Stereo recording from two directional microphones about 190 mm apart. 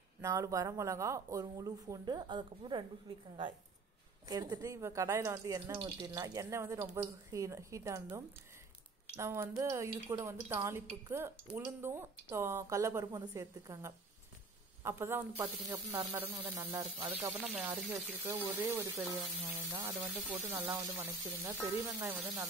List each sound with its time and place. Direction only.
0.2 s speech: 15° right (ahead or behind)
4.3 s speech: 20° right (ahead or behind)